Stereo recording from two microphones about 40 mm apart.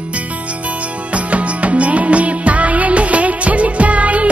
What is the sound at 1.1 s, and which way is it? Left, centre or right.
Music, right.